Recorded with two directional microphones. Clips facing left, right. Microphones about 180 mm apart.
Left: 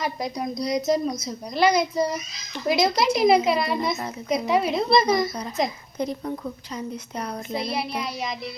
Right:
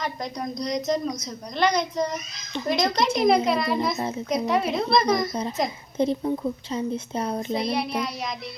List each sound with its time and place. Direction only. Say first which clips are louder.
0.0 s a woman's voice: left 2 dB; 5° left (ahead or behind)
6.0 s a woman's voice: right 5 dB; 25° right (ahead or behind)
7.5 s a woman's voice: even; centre (ahead or behind)